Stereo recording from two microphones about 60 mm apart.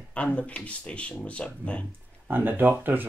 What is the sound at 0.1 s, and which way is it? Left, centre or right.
Speech, left.